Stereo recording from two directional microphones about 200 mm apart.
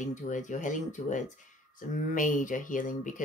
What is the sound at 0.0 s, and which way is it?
Speech, 40° left (ahead or behind).